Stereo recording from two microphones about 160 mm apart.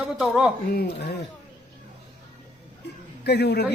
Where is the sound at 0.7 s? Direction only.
90° left.